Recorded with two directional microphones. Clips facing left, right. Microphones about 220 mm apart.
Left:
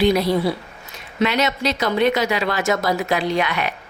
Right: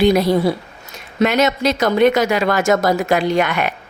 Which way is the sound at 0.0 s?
50° right (ahead or behind).